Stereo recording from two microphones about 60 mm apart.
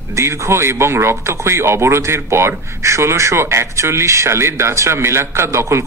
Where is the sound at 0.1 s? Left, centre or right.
Right.